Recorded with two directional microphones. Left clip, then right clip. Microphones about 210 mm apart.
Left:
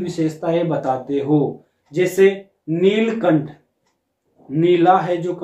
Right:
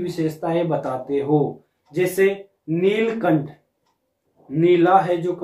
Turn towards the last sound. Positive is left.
turn(degrees=5)  # may be behind; listen again after turning